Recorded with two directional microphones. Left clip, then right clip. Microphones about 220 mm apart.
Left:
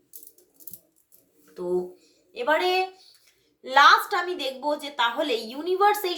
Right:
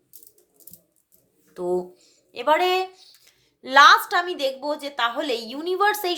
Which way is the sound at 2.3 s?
50° right (ahead or behind).